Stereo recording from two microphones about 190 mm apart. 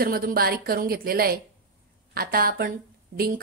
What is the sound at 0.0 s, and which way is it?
A woman's voice, 50° right (ahead or behind).